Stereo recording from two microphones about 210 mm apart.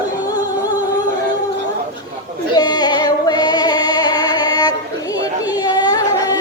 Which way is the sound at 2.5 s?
20° left (ahead or behind).